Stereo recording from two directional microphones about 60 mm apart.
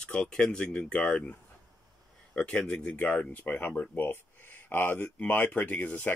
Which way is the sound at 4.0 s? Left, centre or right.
Left.